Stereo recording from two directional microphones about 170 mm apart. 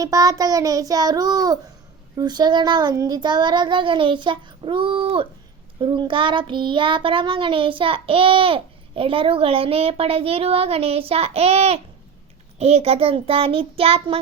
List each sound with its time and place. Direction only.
0.0 s a child's voice: 20° right (ahead or behind)
5.8 s child singing: 30° right (ahead or behind)